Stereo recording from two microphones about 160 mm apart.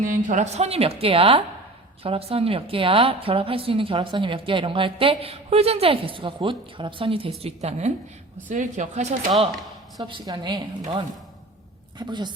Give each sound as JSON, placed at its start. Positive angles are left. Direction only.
{"t": 0.0, "sound": "a woman's voice", "side_deg": -55}
{"t": 10.0, "sound": "a woman's voice", "side_deg": -30}